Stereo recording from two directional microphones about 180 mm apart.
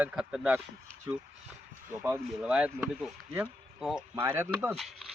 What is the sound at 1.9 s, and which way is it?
Speech, 10° right (ahead or behind).